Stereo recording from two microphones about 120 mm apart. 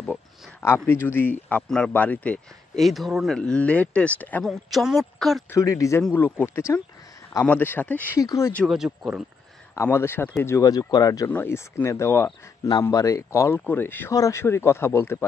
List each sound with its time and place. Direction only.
0.0 s speech: 20° left (ahead or behind)
4.5 s speech: centre (ahead or behind)
5.5 s speech: 25° left (ahead or behind)
8.2 s speech: 25° left (ahead or behind)
8.6 s speech: 5° right (ahead or behind)
9.8 s speech: 20° left (ahead or behind)